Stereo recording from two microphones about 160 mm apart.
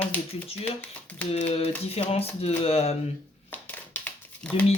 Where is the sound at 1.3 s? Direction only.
40° left (ahead or behind).